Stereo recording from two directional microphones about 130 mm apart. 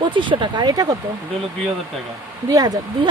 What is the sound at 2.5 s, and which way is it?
Speech, 30° right (ahead or behind).